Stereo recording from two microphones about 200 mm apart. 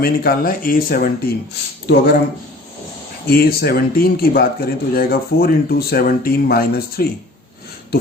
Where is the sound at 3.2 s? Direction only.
50° left (ahead or behind).